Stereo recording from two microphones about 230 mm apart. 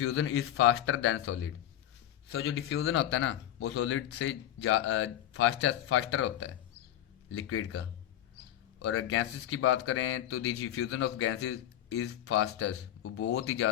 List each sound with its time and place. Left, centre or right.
0.0 s speech: left
7.3 s speech: left
8.8 s speech: left